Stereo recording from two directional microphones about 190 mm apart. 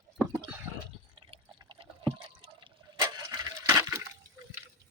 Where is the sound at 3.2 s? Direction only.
20° right (ahead or behind).